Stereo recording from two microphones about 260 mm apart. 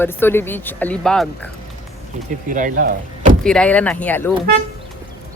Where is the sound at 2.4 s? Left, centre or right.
Right.